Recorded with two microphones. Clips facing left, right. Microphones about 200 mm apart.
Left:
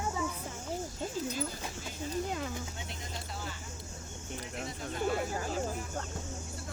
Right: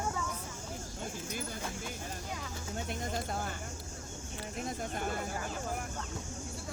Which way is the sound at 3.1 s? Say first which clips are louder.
Right 3 dB; 50° right (ahead or behind).